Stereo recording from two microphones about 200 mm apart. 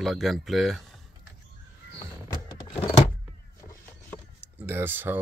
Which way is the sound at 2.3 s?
25° left (ahead or behind).